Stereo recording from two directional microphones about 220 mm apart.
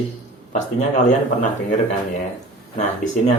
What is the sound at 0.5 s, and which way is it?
Speech, 35° left (ahead or behind).